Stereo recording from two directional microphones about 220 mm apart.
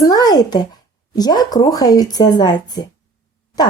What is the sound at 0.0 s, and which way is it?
Speech, 15° left (ahead or behind).